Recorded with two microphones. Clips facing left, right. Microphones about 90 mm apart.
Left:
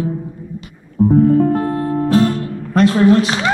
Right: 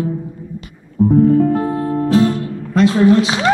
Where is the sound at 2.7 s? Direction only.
50° left (ahead or behind).